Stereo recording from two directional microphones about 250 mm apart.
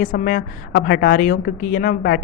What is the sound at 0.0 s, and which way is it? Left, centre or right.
A woman's voice, left.